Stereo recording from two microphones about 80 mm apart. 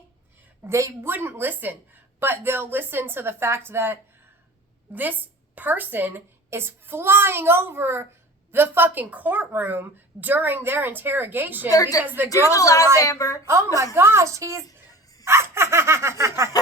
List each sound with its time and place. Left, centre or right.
0.6 s a woman's voice: right
1.0 s a woman's voice: right
11.7 s a woman's voice: left
12.0 s a woman's voice: right
12.3 s a woman's voice: left
13.4 s a woman's voice: right
15.2 s a sound: right